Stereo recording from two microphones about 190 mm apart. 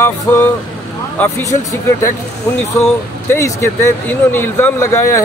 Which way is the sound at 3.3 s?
15° left (ahead or behind).